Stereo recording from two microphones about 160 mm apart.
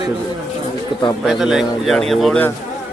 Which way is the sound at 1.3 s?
5° right (ahead or behind).